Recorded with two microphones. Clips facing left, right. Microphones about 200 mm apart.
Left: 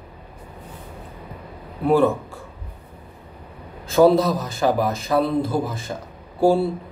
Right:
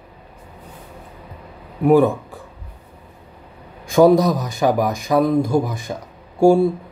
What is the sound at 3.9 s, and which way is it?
Speech, 15° right (ahead or behind).